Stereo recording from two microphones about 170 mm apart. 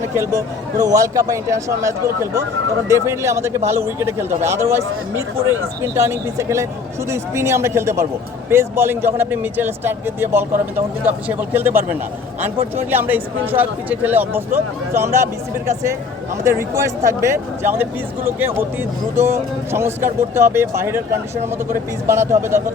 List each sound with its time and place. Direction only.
0.0 s a man's voice: 15° right (ahead or behind)